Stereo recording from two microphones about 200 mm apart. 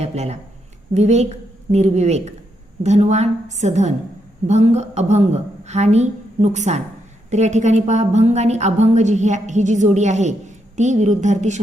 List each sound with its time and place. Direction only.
0.0 s a woman's voice: 30° right (ahead or behind)